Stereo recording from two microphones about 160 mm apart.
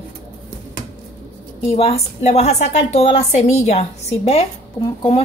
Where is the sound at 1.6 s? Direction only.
40° left (ahead or behind).